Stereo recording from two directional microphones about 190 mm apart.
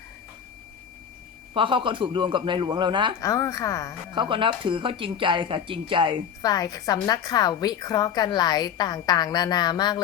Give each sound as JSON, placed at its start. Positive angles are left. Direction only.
{"t": 1.5, "sound": "speech", "side_deg": -25}
{"t": 3.2, "sound": "speech", "side_deg": 15}
{"t": 4.1, "sound": "speech", "side_deg": -25}
{"t": 6.4, "sound": "a woman's voice", "side_deg": 20}